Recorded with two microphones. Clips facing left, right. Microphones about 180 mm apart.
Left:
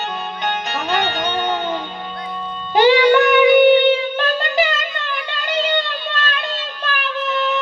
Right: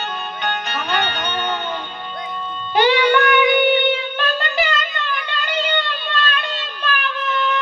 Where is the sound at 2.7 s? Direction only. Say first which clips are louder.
Left 4 dB; 40° left (ahead or behind).